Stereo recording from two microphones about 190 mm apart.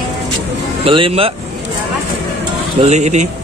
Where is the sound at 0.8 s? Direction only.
30° right (ahead or behind).